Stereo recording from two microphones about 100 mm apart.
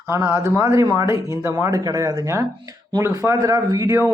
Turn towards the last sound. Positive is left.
turn(degrees=-40)  # may be behind; listen again after turning